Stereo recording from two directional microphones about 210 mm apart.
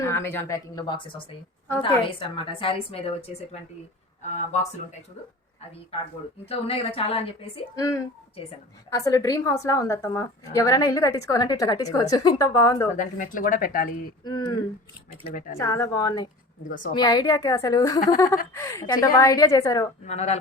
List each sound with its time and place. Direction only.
0.0 s a woman's voice: 10° left (ahead or behind); by 3.3 s 30° left (ahead or behind)
6.4 s a woman's voice: 25° left (ahead or behind)
7.8 s a woman's voice: 15° left (ahead or behind)
13.0 s speech: 40° left (ahead or behind)
14.3 s a woman's voice: 20° left (ahead or behind)
16.6 s speech: 40° left (ahead or behind)
16.9 s a woman's voice: 20° left (ahead or behind)
20.1 s speech: 30° left (ahead or behind)